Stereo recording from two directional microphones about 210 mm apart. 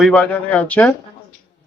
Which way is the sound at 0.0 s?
5° left (ahead or behind).